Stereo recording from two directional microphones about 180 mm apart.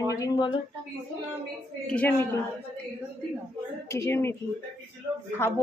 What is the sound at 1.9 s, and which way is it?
Speech, 10° left (ahead or behind).